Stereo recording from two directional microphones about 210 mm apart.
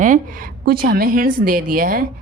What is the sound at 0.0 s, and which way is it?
A woman's voice, 40° right (ahead or behind).